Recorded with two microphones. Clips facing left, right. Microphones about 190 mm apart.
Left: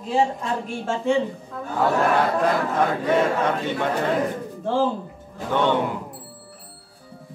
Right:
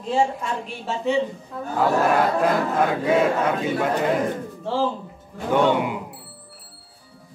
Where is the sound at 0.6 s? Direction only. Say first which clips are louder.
Left 2 dB; 50° left (ahead or behind).